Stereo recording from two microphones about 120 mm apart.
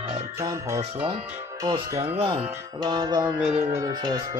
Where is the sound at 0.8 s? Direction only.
45° right (ahead or behind).